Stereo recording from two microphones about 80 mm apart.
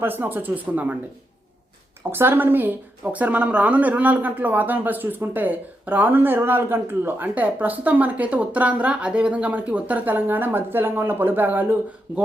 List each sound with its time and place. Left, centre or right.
0.0 s a woman's voice: right
2.0 s a woman's voice: right